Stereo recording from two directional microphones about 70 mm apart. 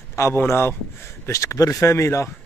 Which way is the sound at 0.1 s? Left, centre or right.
Left.